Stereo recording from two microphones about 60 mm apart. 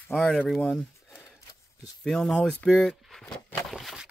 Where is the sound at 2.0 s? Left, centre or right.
Centre.